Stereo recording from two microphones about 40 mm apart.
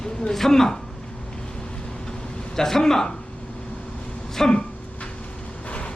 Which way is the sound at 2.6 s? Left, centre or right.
Centre.